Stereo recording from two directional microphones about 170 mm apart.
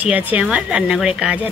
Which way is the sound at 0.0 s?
10° right (ahead or behind).